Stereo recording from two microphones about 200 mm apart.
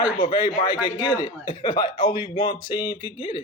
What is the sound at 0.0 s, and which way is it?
Speech, 25° left (ahead or behind).